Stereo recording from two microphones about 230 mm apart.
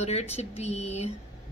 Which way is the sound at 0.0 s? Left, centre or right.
Left.